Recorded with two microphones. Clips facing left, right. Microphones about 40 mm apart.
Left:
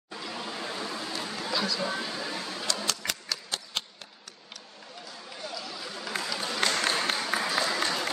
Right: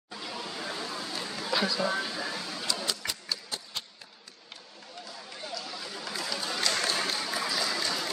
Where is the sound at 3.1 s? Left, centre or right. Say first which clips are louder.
Left 2 dB; left.